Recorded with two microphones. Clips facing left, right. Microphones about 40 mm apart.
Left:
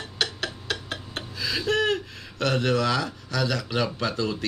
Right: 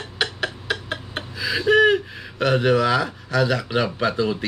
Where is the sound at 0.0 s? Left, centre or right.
Centre.